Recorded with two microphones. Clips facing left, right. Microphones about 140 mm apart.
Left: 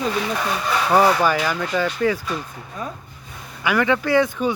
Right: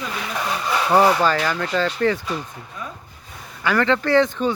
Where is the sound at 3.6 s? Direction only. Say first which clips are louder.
Even; 10° left (ahead or behind).